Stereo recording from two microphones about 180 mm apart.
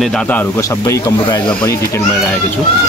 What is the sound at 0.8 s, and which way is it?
Speech, 20° left (ahead or behind).